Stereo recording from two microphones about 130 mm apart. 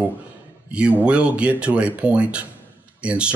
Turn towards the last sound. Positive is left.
turn(degrees=-10)  # may be behind; listen again after turning